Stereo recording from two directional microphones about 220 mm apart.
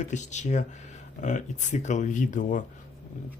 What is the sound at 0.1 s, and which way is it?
Speech, 35° left (ahead or behind).